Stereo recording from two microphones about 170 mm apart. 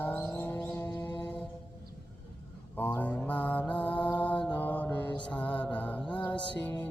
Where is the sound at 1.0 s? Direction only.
10° left (ahead or behind).